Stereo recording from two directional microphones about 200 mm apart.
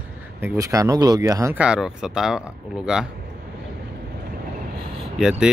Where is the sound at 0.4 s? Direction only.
15° right (ahead or behind).